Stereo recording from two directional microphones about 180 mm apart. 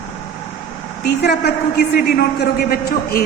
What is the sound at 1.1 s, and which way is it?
A woman's voice, 65° left (ahead or behind).